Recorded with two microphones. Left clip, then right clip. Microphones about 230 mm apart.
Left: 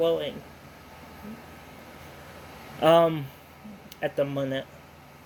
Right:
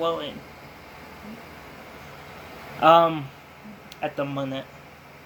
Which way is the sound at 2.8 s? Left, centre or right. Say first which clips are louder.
Right 3 dB; left.